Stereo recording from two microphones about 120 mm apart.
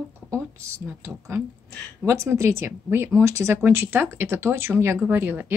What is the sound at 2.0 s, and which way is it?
Speech, 25° right (ahead or behind).